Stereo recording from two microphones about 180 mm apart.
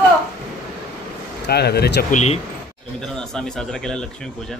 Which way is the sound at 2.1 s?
40° left (ahead or behind).